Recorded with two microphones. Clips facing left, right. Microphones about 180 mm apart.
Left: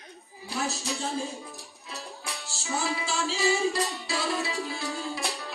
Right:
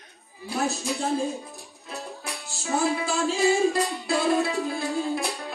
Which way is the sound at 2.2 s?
50° right (ahead or behind).